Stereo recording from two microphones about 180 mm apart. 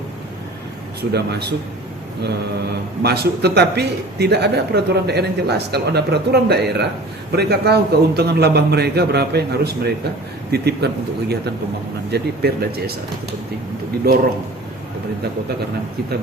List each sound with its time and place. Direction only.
1.1 s a man's voice: 65° right (ahead or behind)
3.0 s a man's voice: 65° right (ahead or behind)
14.0 s a man's voice: 60° right (ahead or behind)